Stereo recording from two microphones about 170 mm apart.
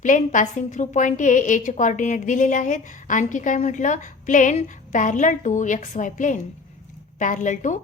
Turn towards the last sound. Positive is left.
turn(degrees=45)  # may be behind; listen again after turning